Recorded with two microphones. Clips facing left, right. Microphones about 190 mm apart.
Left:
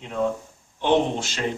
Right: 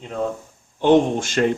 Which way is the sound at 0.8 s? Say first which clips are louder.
Right 5 dB; 50° right (ahead or behind).